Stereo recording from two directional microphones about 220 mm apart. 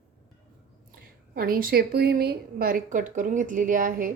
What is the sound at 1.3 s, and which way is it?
A woman's voice, 40° right (ahead or behind).